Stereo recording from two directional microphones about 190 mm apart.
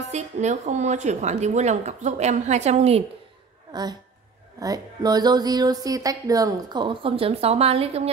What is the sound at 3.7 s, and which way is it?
A woman's voice, 20° right (ahead or behind).